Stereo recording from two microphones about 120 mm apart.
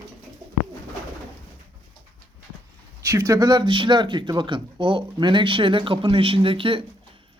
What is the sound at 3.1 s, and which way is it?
Speech, 25° right (ahead or behind).